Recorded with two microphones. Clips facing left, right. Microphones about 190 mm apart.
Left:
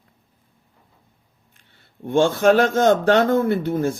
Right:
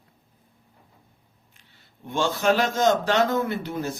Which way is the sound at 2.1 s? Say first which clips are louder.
Left 7 dB; 55° left (ahead or behind).